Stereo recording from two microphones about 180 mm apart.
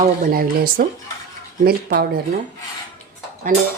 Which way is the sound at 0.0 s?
50° right (ahead or behind).